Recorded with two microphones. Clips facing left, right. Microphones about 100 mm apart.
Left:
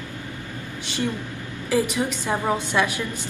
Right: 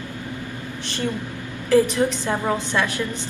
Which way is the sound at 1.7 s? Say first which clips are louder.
Right 5 dB; 15° left (ahead or behind).